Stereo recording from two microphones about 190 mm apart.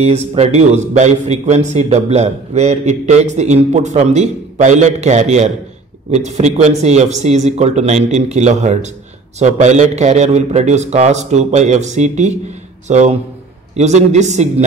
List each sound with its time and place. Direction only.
0.0 s a man's voice: 35° right (ahead or behind)